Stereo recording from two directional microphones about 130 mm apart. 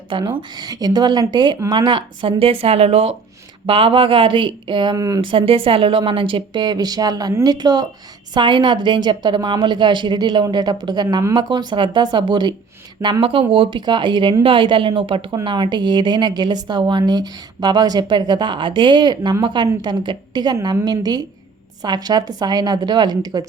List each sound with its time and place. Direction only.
0.1 s a woman's voice: 40° right (ahead or behind)
5.2 s a woman's voice: 45° right (ahead or behind)
13.0 s speech: 20° right (ahead or behind)
13.5 s a woman's voice: 40° right (ahead or behind)